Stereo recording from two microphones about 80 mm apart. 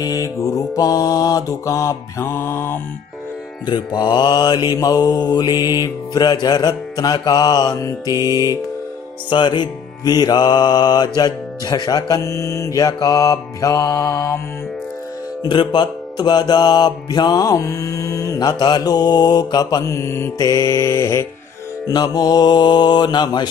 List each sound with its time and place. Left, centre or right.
0.0 s music: left
3.6 s music: left
4.6 s music: left
9.3 s music: left
15.4 s music: left
18.6 s music: left
21.8 s music: left